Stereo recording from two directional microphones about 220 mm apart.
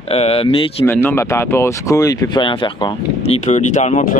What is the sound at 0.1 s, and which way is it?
Speech, 25° left (ahead or behind).